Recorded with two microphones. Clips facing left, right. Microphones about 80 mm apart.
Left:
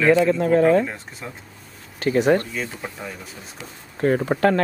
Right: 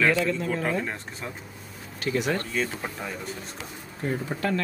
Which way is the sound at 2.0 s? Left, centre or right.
Left.